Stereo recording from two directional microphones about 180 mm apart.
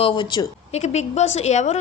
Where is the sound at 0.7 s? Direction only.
40° left (ahead or behind).